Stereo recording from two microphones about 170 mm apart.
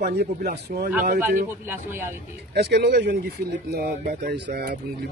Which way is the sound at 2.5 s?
75° right (ahead or behind).